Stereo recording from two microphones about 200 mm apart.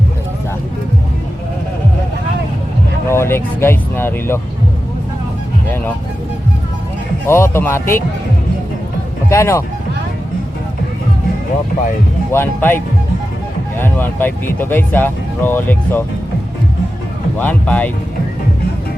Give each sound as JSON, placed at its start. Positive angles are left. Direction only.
{"t": 3.1, "sound": "speech", "side_deg": 10}
{"t": 7.3, "sound": "speech", "side_deg": 10}
{"t": 9.3, "sound": "speech", "side_deg": 15}
{"t": 12.3, "sound": "speech", "side_deg": 10}
{"t": 17.3, "sound": "speech", "side_deg": 10}